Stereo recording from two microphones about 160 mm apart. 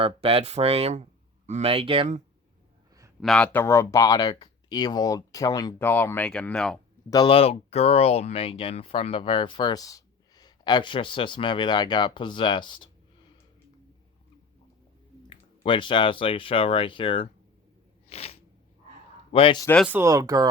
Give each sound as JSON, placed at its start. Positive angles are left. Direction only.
{"t": 0.0, "sound": "speech", "side_deg": -35}
{"t": 3.2, "sound": "speech", "side_deg": 5}
{"t": 7.1, "sound": "speech", "side_deg": 30}
{"t": 15.6, "sound": "speech", "side_deg": 30}
{"t": 18.1, "sound": "a sound", "side_deg": 40}
{"t": 19.3, "sound": "speech", "side_deg": 35}
{"t": 19.9, "sound": "speech", "side_deg": -15}